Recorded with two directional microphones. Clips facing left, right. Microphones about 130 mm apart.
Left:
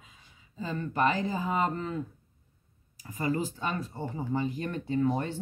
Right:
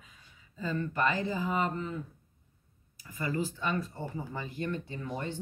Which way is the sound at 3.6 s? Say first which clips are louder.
Even; 30° left (ahead or behind).